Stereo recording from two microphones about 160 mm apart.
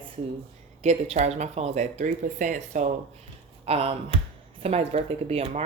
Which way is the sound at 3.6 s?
40° right (ahead or behind).